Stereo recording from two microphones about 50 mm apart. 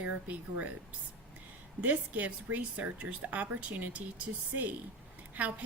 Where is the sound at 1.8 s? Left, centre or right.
Right.